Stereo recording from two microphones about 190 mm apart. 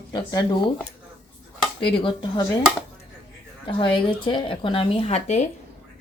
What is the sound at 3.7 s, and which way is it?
A woman's voice, 25° left (ahead or behind).